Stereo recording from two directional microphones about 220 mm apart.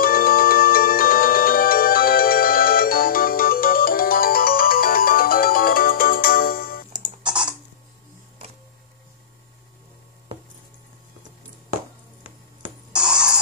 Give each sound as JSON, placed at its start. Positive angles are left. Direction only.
{"t": 0.0, "sound": "music", "side_deg": 40}
{"t": 7.2, "sound": "typing", "side_deg": -5}
{"t": 12.9, "sound": "a sound", "side_deg": -5}